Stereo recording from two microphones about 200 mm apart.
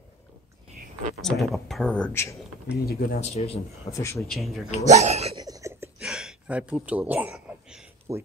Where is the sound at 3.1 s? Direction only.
35° left (ahead or behind).